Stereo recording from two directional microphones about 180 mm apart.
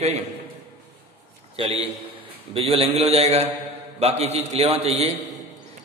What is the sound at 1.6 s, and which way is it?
A man's voice, 35° right (ahead or behind).